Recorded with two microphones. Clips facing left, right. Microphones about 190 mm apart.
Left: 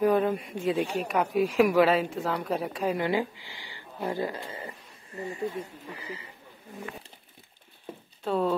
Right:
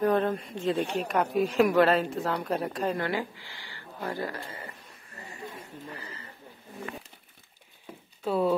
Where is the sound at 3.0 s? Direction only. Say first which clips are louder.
Left 3 dB; 15° left (ahead or behind).